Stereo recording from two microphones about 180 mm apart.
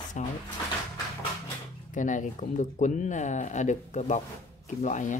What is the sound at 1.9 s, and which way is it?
Speech, 45° left (ahead or behind).